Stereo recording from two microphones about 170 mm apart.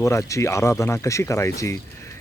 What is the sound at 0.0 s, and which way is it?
Speech, 20° left (ahead or behind).